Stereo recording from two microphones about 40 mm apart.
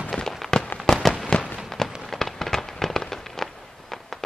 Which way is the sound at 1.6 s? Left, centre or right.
Centre.